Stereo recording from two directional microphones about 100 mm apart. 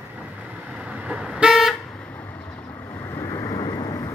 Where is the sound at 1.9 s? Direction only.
15° left (ahead or behind).